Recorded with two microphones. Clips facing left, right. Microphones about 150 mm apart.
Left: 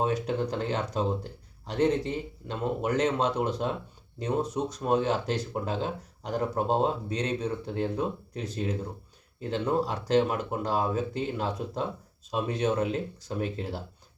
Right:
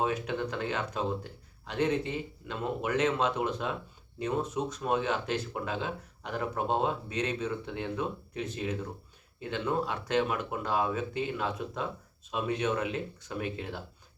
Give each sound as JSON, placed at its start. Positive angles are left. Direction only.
{"t": 0.0, "sound": "speech", "side_deg": 35}